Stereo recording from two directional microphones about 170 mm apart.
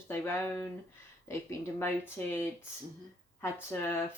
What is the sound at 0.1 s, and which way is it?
Speech, 15° left (ahead or behind).